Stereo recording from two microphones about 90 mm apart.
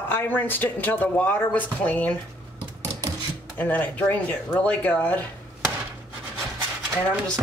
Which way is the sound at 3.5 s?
20° left (ahead or behind).